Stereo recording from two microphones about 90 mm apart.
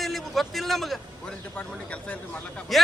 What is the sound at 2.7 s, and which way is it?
Speech, centre (ahead or behind).